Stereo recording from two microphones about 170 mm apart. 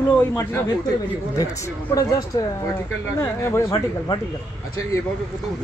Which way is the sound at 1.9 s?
20° left (ahead or behind).